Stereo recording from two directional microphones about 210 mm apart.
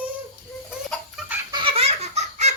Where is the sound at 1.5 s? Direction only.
25° right (ahead or behind).